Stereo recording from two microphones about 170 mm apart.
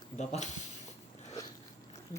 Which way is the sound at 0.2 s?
45° left (ahead or behind).